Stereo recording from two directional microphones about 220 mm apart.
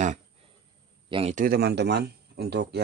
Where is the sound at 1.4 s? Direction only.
45° right (ahead or behind).